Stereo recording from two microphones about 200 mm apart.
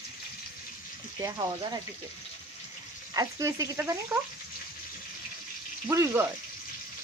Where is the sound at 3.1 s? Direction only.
15° right (ahead or behind).